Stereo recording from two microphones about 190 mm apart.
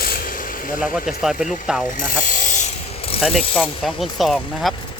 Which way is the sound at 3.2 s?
Centre (ahead or behind).